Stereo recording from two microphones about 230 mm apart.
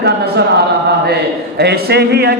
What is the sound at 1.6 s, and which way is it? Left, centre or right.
Speech, right.